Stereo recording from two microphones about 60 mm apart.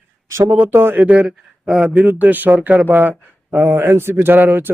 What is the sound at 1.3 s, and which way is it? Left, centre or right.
Speech, centre.